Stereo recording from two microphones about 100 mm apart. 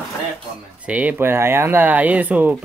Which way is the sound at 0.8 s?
15° right (ahead or behind).